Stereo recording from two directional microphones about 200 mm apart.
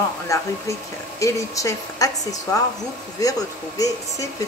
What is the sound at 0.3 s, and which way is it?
Speech, 15° left (ahead or behind).